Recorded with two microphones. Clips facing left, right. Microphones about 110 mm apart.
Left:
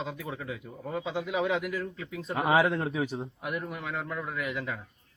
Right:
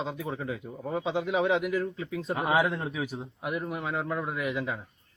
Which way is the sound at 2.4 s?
Centre (ahead or behind).